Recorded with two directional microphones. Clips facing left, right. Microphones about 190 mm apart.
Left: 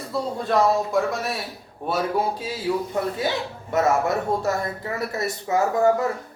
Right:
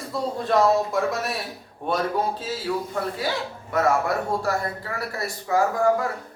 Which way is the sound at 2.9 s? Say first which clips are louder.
Left 2 dB; 20° left (ahead or behind).